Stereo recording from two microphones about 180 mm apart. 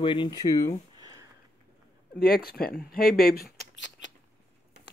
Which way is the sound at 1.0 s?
20° right (ahead or behind).